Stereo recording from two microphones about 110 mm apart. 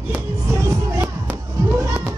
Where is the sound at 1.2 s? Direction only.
20° right (ahead or behind).